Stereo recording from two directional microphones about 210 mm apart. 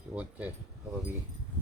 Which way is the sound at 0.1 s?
5° right (ahead or behind).